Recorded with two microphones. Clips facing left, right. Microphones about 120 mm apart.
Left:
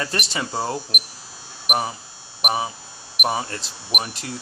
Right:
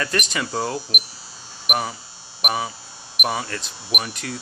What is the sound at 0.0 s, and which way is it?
Speech, 25° left (ahead or behind).